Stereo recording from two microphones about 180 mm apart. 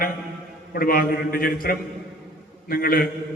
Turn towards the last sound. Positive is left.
turn(degrees=55)  # may be behind; listen again after turning